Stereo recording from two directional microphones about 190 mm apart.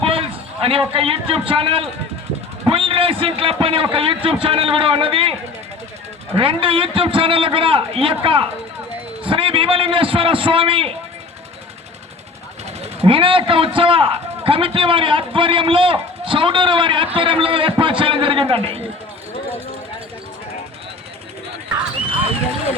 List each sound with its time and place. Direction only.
0.0 s a man's voice: 30° right (ahead or behind)
6.3 s a man's voice: 30° right (ahead or behind)
12.8 s speech: 30° right (ahead or behind)